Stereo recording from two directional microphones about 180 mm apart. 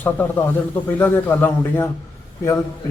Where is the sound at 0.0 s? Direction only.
10° left (ahead or behind).